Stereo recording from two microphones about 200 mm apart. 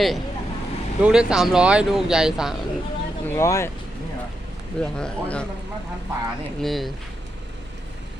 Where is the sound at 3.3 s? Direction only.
15° left (ahead or behind).